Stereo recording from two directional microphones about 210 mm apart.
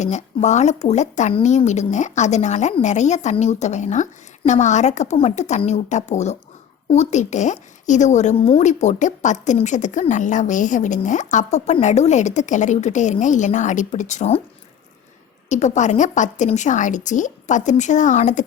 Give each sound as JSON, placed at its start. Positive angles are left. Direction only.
{"t": 0.0, "sound": "speech", "side_deg": 35}
{"t": 15.4, "sound": "speech", "side_deg": 35}